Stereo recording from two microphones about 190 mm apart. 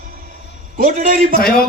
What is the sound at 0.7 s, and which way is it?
Speech, 45° right (ahead or behind).